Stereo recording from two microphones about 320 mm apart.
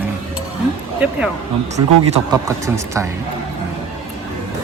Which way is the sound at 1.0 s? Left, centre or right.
Centre.